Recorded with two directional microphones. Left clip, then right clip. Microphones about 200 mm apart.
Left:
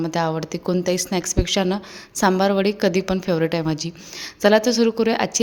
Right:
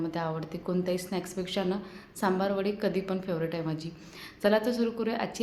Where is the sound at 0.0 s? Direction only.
50° left (ahead or behind).